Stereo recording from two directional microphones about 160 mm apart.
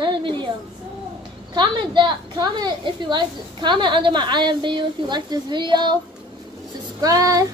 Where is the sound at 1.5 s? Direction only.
30° right (ahead or behind).